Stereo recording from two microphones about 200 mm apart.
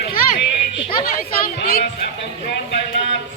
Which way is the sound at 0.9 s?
50° left (ahead or behind).